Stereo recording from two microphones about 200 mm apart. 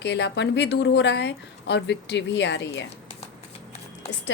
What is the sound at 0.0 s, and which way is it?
A woman's voice, 60° left (ahead or behind).